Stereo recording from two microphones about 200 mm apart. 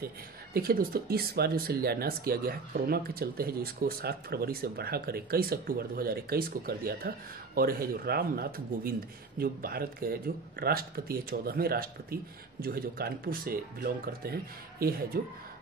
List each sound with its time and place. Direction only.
0.6 s speech: 50° right (ahead or behind)